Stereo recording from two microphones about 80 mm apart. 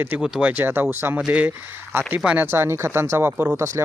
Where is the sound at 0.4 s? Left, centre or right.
Right.